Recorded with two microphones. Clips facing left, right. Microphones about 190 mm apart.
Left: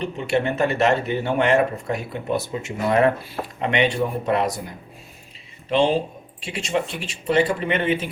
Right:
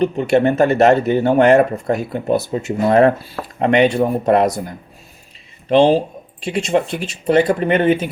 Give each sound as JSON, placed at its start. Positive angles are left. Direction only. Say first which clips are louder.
{"t": 0.0, "sound": "speech", "louder": "right 8 dB", "side_deg": -40}
{"t": 5.6, "sound": "speech", "louder": "right 7 dB", "side_deg": -40}